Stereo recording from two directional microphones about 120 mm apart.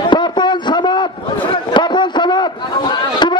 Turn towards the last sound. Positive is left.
turn(degrees=40)  # may be behind; listen again after turning